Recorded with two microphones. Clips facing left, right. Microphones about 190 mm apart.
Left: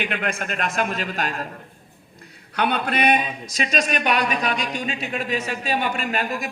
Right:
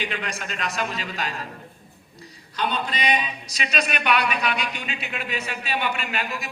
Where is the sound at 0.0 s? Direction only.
55° left (ahead or behind).